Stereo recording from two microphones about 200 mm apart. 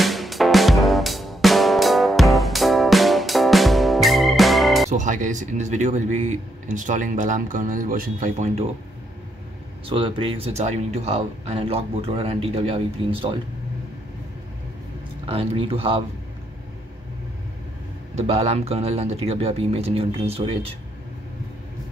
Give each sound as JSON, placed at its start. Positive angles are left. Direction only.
{"t": 0.0, "sound": "music", "side_deg": 0}
{"t": 4.9, "sound": "speech", "side_deg": -40}
{"t": 9.8, "sound": "speech", "side_deg": -25}
{"t": 15.2, "sound": "speech", "side_deg": -30}
{"t": 18.1, "sound": "speech", "side_deg": -30}